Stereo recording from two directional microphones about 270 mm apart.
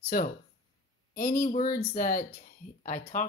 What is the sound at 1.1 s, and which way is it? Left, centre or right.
Speech, left.